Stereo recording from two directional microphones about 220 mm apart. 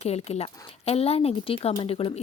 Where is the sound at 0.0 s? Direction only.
30° left (ahead or behind).